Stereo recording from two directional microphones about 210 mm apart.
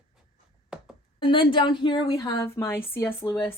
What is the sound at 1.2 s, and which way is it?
A woman's voice, 25° left (ahead or behind).